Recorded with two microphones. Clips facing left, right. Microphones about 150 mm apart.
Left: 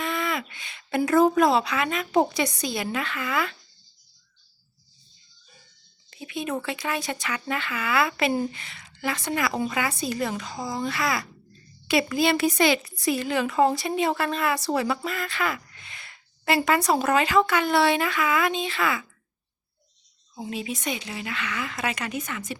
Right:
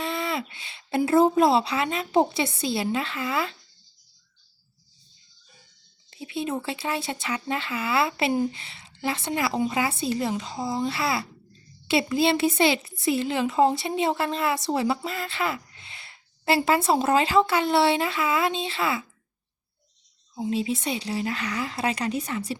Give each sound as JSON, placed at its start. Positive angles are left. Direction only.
{"t": 0.0, "sound": "a woman's voice", "side_deg": -30}
{"t": 6.2, "sound": "a woman's voice", "side_deg": -25}
{"t": 20.4, "sound": "speech", "side_deg": -30}